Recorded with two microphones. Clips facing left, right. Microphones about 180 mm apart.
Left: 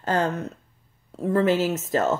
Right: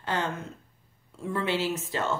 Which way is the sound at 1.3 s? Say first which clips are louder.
Left 7 dB; 45° left (ahead or behind).